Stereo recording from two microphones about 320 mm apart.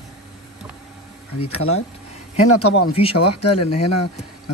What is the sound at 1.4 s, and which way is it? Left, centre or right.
Speech, left.